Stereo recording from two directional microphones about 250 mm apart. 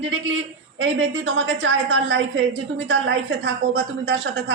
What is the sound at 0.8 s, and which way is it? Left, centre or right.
A woman's voice, right.